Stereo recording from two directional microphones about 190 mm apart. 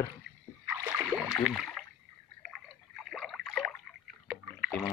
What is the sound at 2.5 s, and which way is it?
Drip, centre (ahead or behind).